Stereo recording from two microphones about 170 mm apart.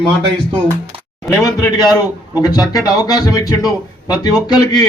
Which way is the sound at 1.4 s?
20° left (ahead or behind).